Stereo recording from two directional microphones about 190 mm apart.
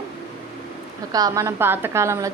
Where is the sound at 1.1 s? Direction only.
20° right (ahead or behind).